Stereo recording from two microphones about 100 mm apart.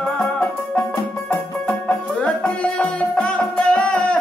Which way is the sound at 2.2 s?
10° left (ahead or behind).